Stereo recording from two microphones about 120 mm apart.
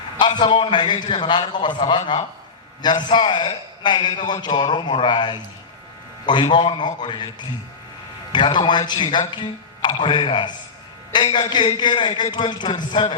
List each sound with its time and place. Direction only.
0.2 s a man's voice: 40° left (ahead or behind)
8.3 s a man's voice: 40° left (ahead or behind)